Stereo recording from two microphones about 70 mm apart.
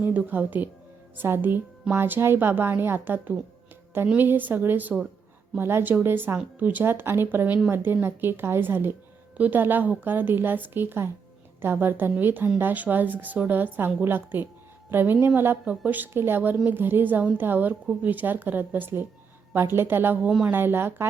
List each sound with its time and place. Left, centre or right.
0.0 s a woman's voice: right
15.6 s speech: centre
15.9 s a woman's voice: right